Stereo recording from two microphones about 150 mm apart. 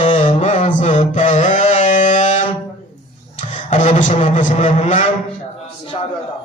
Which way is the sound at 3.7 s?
55° left (ahead or behind).